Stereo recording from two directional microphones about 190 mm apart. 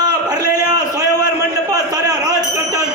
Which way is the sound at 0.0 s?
20° right (ahead or behind).